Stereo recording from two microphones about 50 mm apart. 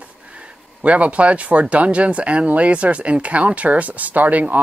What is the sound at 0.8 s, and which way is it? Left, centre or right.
Speech, right.